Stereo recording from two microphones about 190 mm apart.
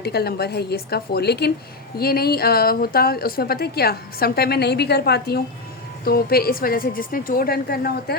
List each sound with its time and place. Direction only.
0.0 s a woman's voice: 55° left (ahead or behind)